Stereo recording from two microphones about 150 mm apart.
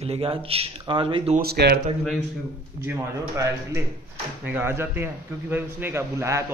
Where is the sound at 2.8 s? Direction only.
20° right (ahead or behind).